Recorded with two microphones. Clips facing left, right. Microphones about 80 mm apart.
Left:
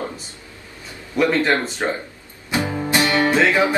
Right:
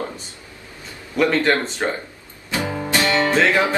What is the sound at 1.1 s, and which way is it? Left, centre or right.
Music, centre.